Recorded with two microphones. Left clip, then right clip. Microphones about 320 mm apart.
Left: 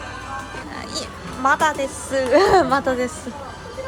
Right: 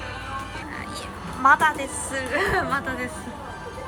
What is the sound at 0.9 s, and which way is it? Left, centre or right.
A woman's voice, centre.